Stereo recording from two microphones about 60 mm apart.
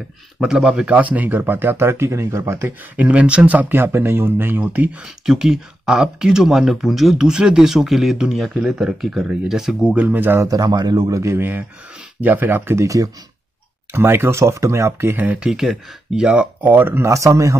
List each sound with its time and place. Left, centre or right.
0.4 s speech: centre; by 2.7 s right
3.0 s speech: right
5.0 s speech: centre
10.0 s speech: right
10.4 s a man's voice: right
11.3 s speech: right
12.8 s a man's voice: right
13.9 s speech: right
15.4 s speech: centre
16.3 s speech: right
17.1 s a man's voice: right